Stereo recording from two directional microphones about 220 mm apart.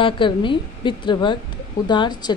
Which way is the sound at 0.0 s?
20° left (ahead or behind).